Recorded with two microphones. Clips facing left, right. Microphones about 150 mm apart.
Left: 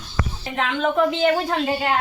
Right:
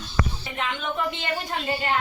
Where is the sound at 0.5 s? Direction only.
90° left.